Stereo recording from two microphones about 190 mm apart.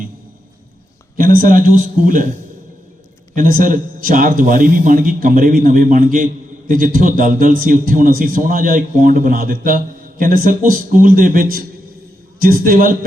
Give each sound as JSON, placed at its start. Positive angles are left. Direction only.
{"t": 1.2, "sound": "a man's voice", "side_deg": -50}
{"t": 3.3, "sound": "a man's voice", "side_deg": -45}